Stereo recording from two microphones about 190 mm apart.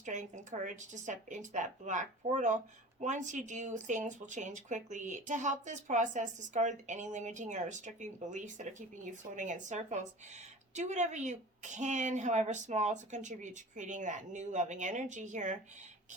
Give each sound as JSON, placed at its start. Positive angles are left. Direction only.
{"t": 0.0, "sound": "a woman's voice", "side_deg": -40}